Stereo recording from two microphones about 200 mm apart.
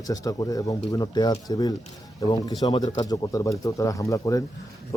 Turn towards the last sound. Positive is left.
turn(degrees=15)  # may be behind; listen again after turning